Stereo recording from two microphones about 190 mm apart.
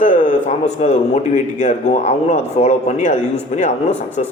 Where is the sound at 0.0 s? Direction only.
40° left (ahead or behind).